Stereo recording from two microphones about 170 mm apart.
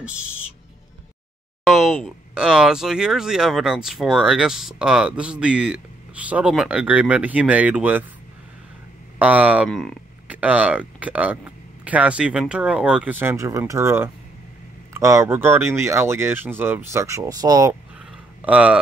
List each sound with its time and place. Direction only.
1.7 s speech: centre (ahead or behind)
9.2 s speech: 10° right (ahead or behind)
9.7 s speech: 5° left (ahead or behind)
10.2 s speech: 10° right (ahead or behind)
18.4 s speech: 5° right (ahead or behind)